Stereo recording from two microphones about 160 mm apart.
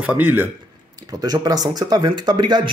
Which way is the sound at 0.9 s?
25° right (ahead or behind).